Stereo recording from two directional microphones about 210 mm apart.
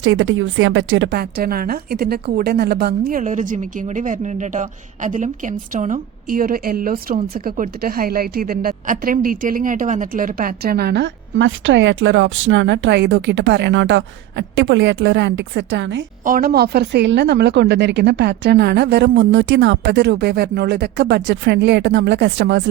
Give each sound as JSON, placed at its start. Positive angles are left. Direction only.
{"t": 0.0, "sound": "a woman's voice", "side_deg": -70}
{"t": 16.2, "sound": "speech", "side_deg": -45}